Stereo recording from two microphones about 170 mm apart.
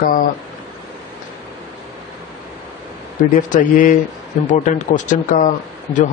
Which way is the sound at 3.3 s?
50° left (ahead or behind).